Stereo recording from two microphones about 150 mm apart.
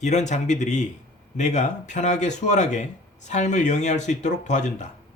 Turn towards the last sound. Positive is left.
turn(degrees=50)  # may be behind; listen again after turning